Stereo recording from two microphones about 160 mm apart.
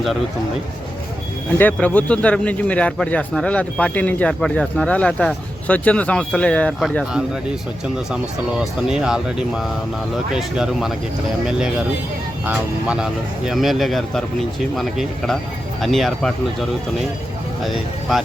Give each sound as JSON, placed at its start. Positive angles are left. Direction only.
{"t": 1.5, "sound": "a man's voice", "side_deg": 10}
{"t": 8.9, "sound": "speech", "side_deg": -5}